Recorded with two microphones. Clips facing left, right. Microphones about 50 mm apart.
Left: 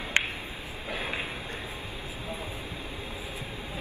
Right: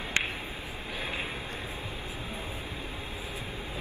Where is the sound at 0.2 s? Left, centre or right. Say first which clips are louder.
Left 3 dB; left.